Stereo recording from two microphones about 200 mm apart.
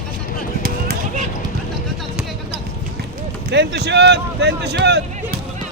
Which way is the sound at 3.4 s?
60° right (ahead or behind).